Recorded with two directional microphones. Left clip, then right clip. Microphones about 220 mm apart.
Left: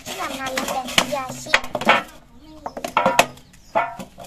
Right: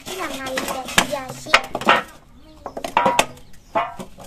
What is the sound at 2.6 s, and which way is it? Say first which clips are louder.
Music: even; centre (ahead or behind).